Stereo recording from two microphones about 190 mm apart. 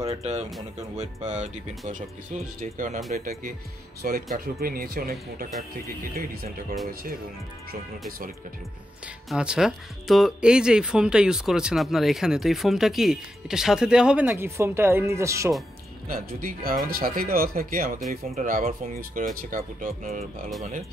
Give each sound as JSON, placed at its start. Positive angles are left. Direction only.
{"t": 0.0, "sound": "speech", "side_deg": -35}
{"t": 9.0, "sound": "speech", "side_deg": -5}
{"t": 16.1, "sound": "speech", "side_deg": -50}